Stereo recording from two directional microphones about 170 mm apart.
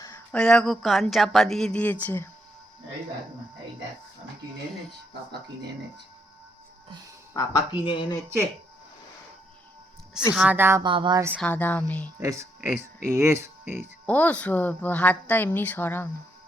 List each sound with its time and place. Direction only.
0.3 s speech: 5° left (ahead or behind)
7.3 s speech: 25° left (ahead or behind)
10.3 s speech: 10° right (ahead or behind)
10.8 s speech: 30° right (ahead or behind)
11.3 s a woman's voice: 10° left (ahead or behind)
12.2 s speech: 20° right (ahead or behind)
14.1 s a woman's voice: 10° left (ahead or behind)